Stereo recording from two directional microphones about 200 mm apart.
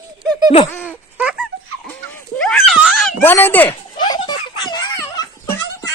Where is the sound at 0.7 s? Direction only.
10° left (ahead or behind).